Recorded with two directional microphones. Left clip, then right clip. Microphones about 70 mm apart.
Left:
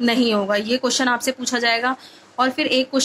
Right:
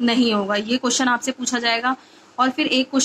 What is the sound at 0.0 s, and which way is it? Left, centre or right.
A woman's voice, left.